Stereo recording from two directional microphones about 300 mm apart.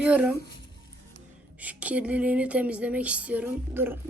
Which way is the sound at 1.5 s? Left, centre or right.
Centre.